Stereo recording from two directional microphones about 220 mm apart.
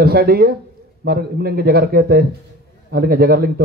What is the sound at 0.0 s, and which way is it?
A man's voice, 45° right (ahead or behind).